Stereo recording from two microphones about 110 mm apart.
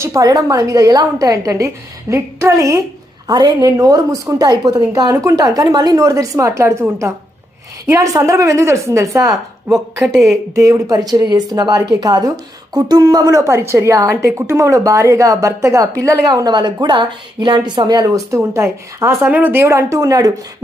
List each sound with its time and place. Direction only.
0.0 s a woman's voice: 35° right (ahead or behind)
9.6 s speech: centre (ahead or behind)
10.2 s a woman's voice: 30° right (ahead or behind)